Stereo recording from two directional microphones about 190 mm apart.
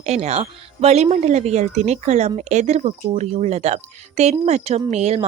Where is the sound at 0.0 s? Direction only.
35° right (ahead or behind).